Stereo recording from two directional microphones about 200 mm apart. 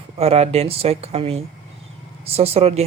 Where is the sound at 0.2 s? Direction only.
30° right (ahead or behind).